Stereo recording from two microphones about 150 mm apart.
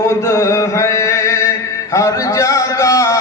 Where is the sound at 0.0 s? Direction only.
20° left (ahead or behind).